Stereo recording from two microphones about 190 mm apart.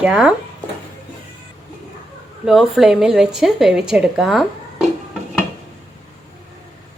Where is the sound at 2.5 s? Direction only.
Centre (ahead or behind).